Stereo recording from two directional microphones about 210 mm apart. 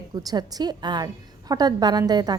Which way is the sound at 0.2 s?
15° right (ahead or behind).